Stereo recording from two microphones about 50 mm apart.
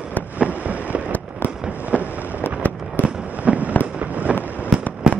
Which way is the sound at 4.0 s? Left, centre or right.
Right.